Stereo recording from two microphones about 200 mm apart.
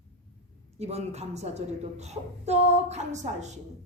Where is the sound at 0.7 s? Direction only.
30° right (ahead or behind).